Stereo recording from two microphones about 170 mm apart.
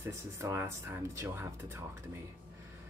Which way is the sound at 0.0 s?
15° right (ahead or behind).